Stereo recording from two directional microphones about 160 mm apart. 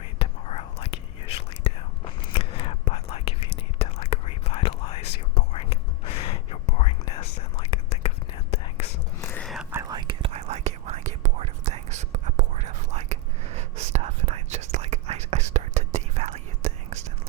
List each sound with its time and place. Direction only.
0.2 s whispering: 40° left (ahead or behind)
9.2 s whispering: 15° left (ahead or behind)
9.7 s whispering: 25° right (ahead or behind); by 17.1 s 45° right (ahead or behind)